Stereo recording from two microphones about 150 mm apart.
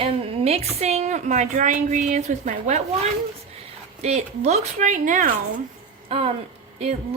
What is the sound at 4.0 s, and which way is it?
Speech, 50° right (ahead or behind).